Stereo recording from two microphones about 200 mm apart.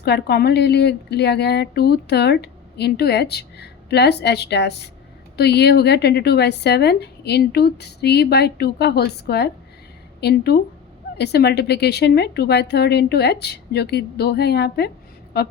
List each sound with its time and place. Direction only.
0.0 s speech: 55° left (ahead or behind)